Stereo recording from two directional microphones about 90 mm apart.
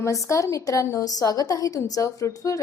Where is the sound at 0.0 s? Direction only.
35° left (ahead or behind).